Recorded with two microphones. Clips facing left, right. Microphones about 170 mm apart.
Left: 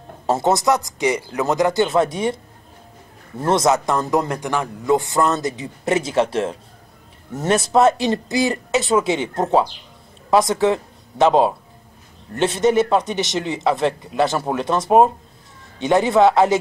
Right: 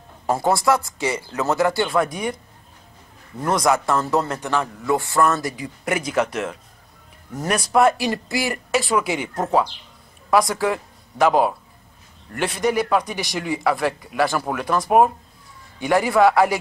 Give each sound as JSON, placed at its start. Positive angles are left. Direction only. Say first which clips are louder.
{"t": 0.3, "sound": "a man's voice", "louder": "left 1 dB", "side_deg": 20}